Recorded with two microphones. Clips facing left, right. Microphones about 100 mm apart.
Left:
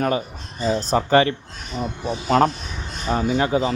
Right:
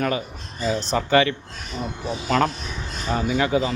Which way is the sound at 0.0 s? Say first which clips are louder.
Left 2 dB; 30° left (ahead or behind).